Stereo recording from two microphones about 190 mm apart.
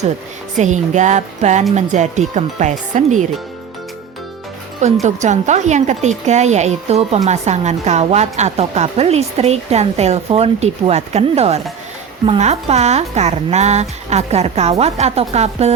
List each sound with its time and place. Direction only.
0.5 s a woman's voice: 40° right (ahead or behind)
5.0 s a woman's voice: 40° right (ahead or behind)